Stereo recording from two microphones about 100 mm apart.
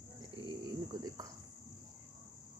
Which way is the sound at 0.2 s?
60° right (ahead or behind).